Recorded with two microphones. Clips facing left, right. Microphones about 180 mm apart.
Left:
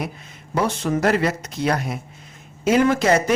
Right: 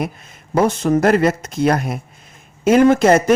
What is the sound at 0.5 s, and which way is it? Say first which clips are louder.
Speech: right 6 dB; 45° right (ahead or behind).